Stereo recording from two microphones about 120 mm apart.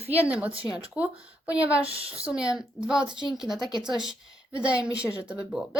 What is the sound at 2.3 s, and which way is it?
A woman's voice, 5° right (ahead or behind).